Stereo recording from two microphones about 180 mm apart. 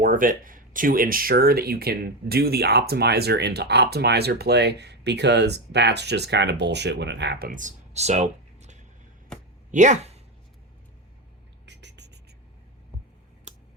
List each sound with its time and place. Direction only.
0.0 s speech: 50° right (ahead or behind)
11.6 s rodents: 75° right (ahead or behind)